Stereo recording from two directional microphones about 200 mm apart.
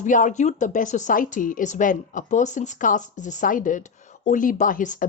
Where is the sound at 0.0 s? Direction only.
40° left (ahead or behind).